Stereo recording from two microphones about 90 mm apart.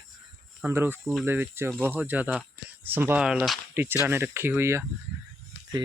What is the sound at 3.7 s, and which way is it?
Speech, 25° right (ahead or behind).